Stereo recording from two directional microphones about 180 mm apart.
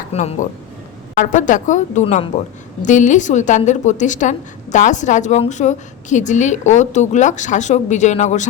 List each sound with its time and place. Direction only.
0.1 s a woman's voice: 40° left (ahead or behind)